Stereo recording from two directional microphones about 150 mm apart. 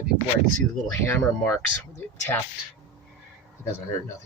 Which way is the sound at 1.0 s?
15° left (ahead or behind).